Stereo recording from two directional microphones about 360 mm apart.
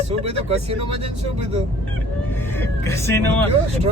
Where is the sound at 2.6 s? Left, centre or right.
Centre.